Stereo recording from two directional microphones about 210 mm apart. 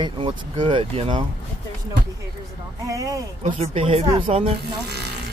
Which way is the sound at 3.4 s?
30° right (ahead or behind).